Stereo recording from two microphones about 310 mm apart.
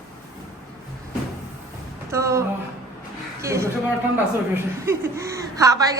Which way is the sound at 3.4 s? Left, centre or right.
Centre.